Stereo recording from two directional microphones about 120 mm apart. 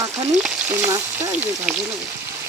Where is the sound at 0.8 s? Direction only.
20° right (ahead or behind).